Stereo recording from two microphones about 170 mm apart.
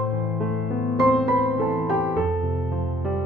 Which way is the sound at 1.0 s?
Centre (ahead or behind).